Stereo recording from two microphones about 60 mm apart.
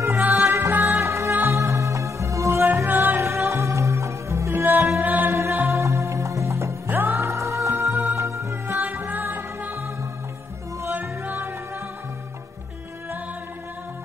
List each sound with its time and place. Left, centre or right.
0.0 s music: right
1.0 s music: right
2.6 s music: right
5.7 s music: right
6.9 s music: right
7.2 s music: right
8.7 s music: right
10.9 s music: right